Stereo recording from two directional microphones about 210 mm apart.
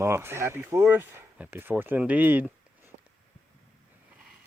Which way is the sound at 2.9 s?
55° right (ahead or behind).